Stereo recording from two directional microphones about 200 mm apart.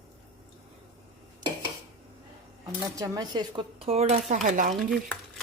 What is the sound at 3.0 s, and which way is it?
Speech, 20° right (ahead or behind).